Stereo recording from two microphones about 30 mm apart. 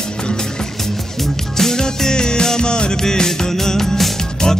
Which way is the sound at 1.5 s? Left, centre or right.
Centre.